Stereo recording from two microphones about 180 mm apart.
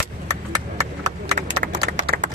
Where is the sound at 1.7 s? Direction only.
90° right.